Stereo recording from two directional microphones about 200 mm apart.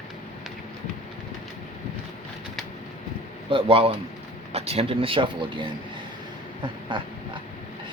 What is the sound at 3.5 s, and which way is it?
Speech, 25° right (ahead or behind).